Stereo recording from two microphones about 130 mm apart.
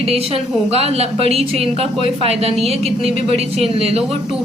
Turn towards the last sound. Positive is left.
turn(degrees=-50)  # may be behind; listen again after turning